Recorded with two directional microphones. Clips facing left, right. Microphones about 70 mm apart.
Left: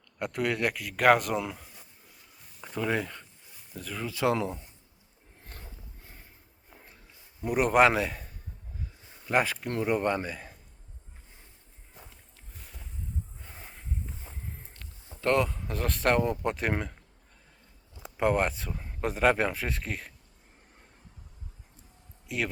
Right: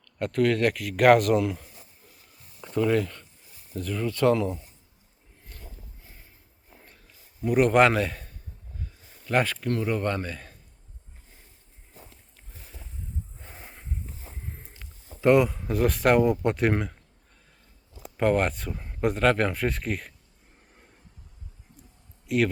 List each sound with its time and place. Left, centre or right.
0.0 s speech: centre
7.4 s speech: centre
9.6 s speech: centre
14.6 s speech: centre
18.2 s speech: centre
22.3 s speech: centre